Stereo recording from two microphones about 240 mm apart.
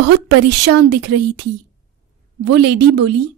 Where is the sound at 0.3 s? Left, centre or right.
Right.